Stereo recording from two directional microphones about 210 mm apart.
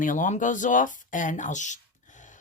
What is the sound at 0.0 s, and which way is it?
Speech, 40° left (ahead or behind).